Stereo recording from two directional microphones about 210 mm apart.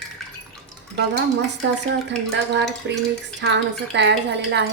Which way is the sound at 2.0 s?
55° right (ahead or behind).